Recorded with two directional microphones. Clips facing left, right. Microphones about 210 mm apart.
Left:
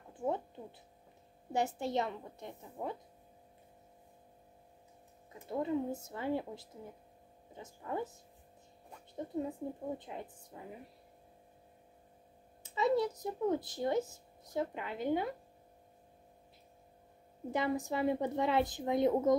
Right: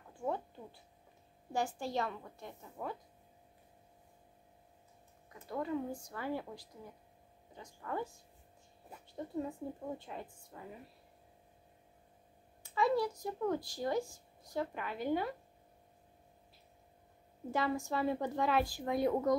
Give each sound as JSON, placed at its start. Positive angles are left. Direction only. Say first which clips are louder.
{"t": 0.2, "sound": "a sound", "louder": "left 2 dB", "side_deg": 20}
{"t": 1.5, "sound": "speech", "louder": "left 3 dB", "side_deg": 20}
{"t": 5.3, "sound": "speech", "louder": "left 3 dB", "side_deg": 25}
{"t": 9.8, "sound": "speech", "louder": "left 2 dB", "side_deg": 20}
{"t": 12.6, "sound": "speech", "louder": "left 1 dB", "side_deg": 20}
{"t": 17.5, "sound": "speech", "louder": "left 1 dB", "side_deg": 20}